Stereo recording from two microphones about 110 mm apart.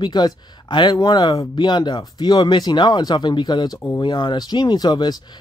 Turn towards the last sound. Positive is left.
turn(degrees=40)  # may be behind; listen again after turning